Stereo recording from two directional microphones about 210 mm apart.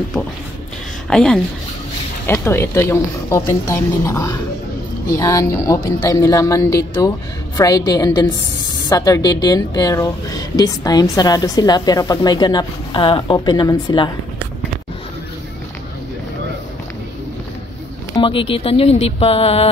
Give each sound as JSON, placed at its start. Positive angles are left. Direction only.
{"t": 1.1, "sound": "a woman's voice", "side_deg": 0}
{"t": 18.1, "sound": "a woman's voice", "side_deg": 25}